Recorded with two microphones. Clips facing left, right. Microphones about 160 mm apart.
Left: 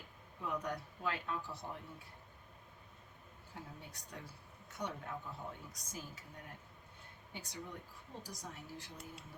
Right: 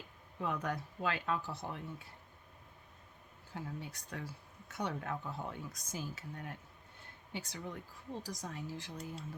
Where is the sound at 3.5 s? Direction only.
90° right.